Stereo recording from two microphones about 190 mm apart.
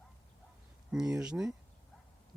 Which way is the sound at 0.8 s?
5° right (ahead or behind).